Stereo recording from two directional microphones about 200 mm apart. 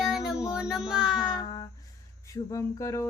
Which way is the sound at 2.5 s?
15° left (ahead or behind).